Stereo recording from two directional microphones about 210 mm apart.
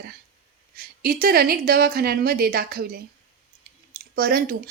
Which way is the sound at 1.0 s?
45° right (ahead or behind).